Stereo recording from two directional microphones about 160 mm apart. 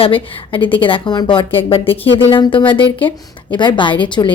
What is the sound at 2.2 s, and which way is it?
Speech, 30° left (ahead or behind).